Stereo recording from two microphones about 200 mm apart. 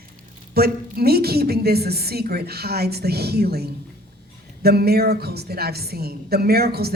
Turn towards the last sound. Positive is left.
turn(degrees=-50)  # may be behind; listen again after turning